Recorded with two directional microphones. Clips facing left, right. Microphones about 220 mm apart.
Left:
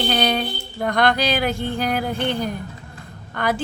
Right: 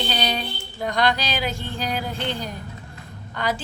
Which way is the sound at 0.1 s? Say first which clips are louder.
Left 5 dB; 55° left (ahead or behind).